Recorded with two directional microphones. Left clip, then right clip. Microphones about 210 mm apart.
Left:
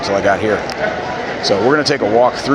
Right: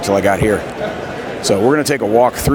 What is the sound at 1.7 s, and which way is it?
Speech, 55° right (ahead or behind).